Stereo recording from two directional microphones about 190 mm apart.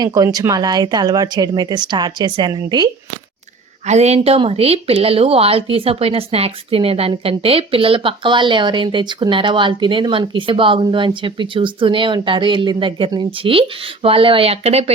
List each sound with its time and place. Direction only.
0.0 s speech: 20° right (ahead or behind)
3.8 s speech: 35° right (ahead or behind)